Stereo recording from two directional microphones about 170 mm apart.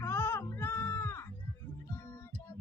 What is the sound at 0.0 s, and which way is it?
Music, 15° left (ahead or behind).